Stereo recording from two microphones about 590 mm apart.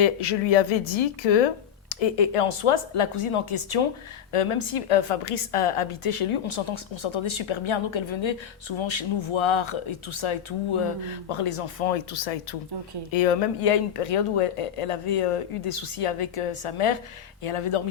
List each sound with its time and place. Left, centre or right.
0.0 s a woman's voice: left